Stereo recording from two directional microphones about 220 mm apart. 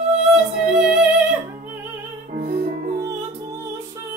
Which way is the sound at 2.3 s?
40° right (ahead or behind).